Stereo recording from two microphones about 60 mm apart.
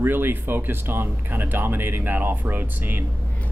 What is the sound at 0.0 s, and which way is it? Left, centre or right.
Speech, right.